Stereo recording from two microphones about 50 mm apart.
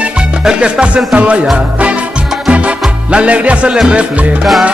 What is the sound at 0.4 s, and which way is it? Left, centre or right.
Music, centre.